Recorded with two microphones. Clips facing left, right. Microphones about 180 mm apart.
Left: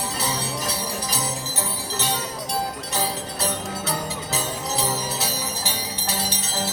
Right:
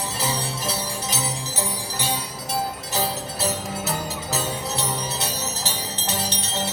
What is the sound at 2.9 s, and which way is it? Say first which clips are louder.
Music: right 1 dB; centre (ahead or behind).